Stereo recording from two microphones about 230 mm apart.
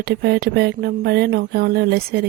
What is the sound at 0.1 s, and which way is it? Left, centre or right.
A woman's voice, right.